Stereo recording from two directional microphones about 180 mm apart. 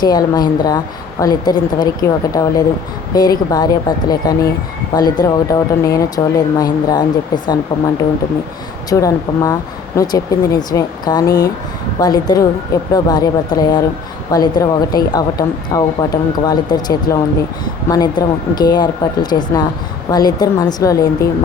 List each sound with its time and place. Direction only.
0.0 s a woman's voice: 20° left (ahead or behind)
8.9 s a woman's voice: 20° left (ahead or behind)